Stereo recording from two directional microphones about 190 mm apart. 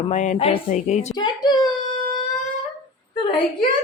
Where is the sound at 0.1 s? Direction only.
40° left (ahead or behind).